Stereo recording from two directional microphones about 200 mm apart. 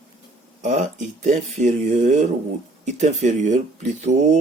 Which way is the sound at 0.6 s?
40° right (ahead or behind).